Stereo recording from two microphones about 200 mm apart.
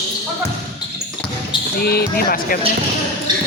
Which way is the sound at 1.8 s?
50° left (ahead or behind).